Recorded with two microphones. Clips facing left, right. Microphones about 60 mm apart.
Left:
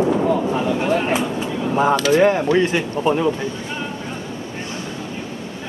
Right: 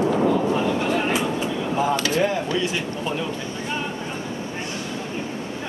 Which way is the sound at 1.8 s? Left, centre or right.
Left.